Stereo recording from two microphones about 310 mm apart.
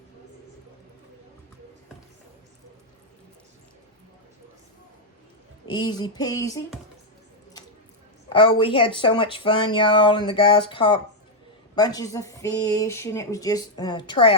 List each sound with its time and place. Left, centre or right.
5.6 s speech: centre
8.3 s speech: centre